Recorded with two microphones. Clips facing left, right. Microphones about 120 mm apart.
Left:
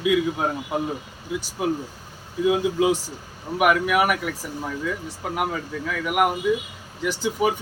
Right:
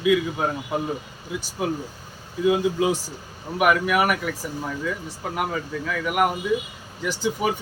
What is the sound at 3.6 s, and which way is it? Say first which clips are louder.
Speech: even; 10° left (ahead or behind).